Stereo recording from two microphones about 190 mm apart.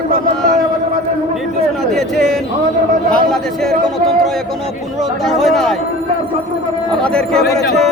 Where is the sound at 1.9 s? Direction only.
Centre (ahead or behind).